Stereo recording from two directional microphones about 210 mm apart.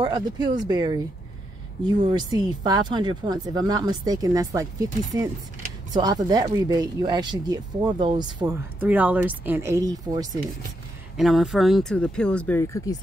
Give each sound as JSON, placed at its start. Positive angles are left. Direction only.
{"t": 0.0, "sound": "speech", "side_deg": -20}
{"t": 2.0, "sound": "speech", "side_deg": -20}
{"t": 8.7, "sound": "a woman's voice", "side_deg": -10}
{"t": 11.1, "sound": "speech", "side_deg": 0}